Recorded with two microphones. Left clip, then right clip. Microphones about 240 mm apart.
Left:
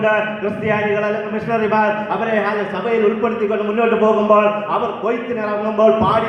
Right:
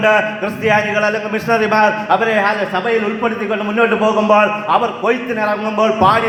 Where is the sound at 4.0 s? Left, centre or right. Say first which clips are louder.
Even; right.